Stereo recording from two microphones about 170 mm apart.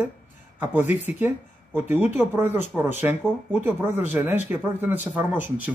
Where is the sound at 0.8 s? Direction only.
45° left (ahead or behind).